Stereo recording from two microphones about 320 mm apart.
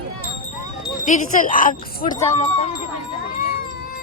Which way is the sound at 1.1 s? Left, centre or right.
Left.